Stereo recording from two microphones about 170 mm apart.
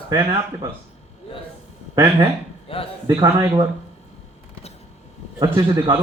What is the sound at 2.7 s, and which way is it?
Speech, 35° left (ahead or behind).